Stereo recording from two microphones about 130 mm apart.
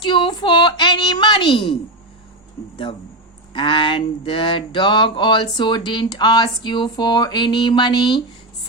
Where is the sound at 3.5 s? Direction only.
40° left (ahead or behind).